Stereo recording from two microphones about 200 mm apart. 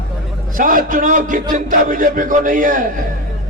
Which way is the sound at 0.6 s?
45° right (ahead or behind).